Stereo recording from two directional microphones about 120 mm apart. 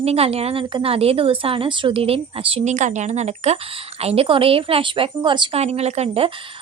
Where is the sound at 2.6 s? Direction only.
85° right; by 5.5 s 40° right (ahead or behind).